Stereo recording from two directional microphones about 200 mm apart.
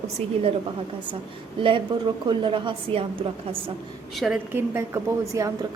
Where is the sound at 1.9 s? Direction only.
20° right (ahead or behind).